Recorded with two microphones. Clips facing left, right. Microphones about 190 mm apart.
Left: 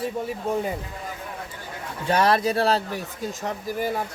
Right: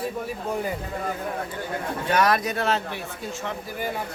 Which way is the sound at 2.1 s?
30° left (ahead or behind).